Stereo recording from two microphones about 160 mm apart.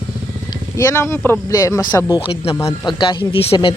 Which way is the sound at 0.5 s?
20° left (ahead or behind).